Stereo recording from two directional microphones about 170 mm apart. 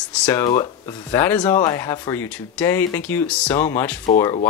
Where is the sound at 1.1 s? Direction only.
10° left (ahead or behind).